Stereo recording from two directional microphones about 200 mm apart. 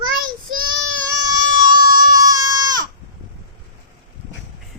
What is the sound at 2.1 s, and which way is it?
Goat, 20° right (ahead or behind).